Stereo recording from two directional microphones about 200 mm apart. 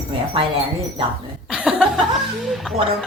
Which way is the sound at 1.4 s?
5° right (ahead or behind).